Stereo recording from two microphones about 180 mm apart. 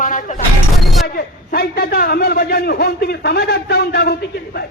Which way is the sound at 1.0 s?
60° left (ahead or behind).